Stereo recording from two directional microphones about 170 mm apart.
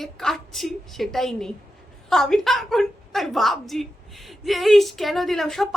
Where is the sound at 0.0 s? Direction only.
Centre (ahead or behind).